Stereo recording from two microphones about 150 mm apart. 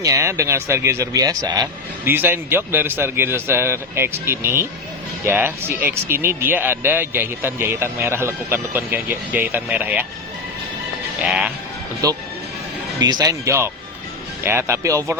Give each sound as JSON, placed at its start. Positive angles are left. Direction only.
{"t": 0.0, "sound": "speech", "side_deg": -20}
{"t": 2.0, "sound": "speech", "side_deg": -15}
{"t": 11.2, "sound": "speech", "side_deg": -5}
{"t": 12.0, "sound": "speech", "side_deg": -25}